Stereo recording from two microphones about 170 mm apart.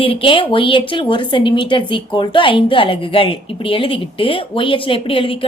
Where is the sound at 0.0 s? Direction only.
30° left (ahead or behind).